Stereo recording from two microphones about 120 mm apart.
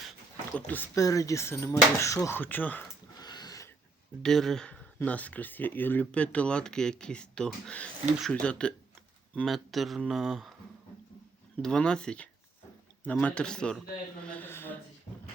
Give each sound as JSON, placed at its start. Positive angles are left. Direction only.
{"t": 0.5, "sound": "speech", "side_deg": 15}
{"t": 0.9, "sound": "speech", "side_deg": 30}
{"t": 3.2, "sound": "a sound", "side_deg": 35}
{"t": 4.2, "sound": "speech", "side_deg": 5}
{"t": 11.6, "sound": "speech", "side_deg": 5}